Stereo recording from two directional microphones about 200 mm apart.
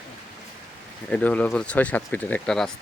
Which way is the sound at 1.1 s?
5° left (ahead or behind).